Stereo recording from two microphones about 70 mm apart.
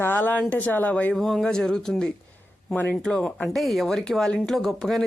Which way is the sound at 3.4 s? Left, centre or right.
Centre.